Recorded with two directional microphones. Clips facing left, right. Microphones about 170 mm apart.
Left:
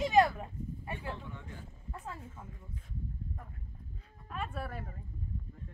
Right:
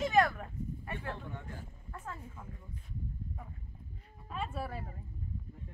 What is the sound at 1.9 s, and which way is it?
Speech, 10° left (ahead or behind).